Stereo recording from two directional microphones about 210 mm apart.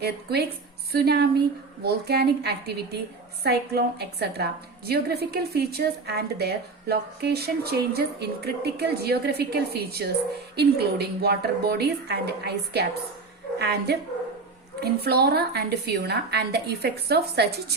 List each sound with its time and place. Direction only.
0.0 s a woman's voice: 50° right (ahead or behind)